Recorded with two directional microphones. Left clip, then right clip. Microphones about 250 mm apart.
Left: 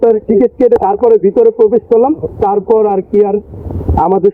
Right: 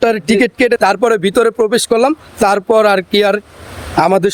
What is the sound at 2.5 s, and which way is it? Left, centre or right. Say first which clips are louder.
Speech: even; right.